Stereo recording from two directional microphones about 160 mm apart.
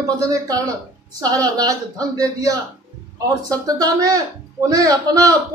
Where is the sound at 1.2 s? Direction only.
25° right (ahead or behind).